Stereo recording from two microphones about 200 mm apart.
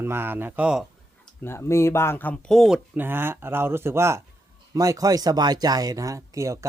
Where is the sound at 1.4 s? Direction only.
15° left (ahead or behind).